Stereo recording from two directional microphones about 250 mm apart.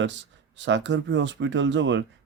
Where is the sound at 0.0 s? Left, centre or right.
Right.